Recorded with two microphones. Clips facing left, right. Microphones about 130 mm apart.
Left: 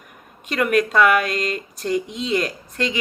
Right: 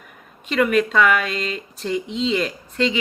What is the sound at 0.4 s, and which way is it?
A woman's voice, 45° left (ahead or behind).